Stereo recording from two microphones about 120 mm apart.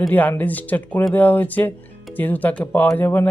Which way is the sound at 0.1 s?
15° left (ahead or behind).